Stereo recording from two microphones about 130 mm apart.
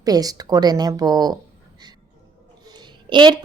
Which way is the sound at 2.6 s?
35° right (ahead or behind).